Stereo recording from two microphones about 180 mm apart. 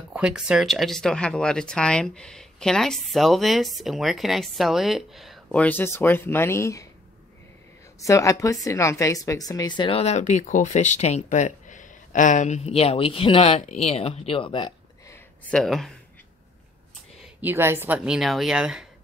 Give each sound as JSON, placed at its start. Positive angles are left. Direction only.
{"t": 0.1, "sound": "speech", "side_deg": -5}
{"t": 8.0, "sound": "a woman's voice", "side_deg": 15}
{"t": 15.5, "sound": "speech", "side_deg": 0}
{"t": 17.4, "sound": "speech", "side_deg": -10}